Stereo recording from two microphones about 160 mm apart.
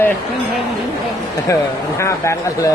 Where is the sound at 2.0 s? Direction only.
15° left (ahead or behind).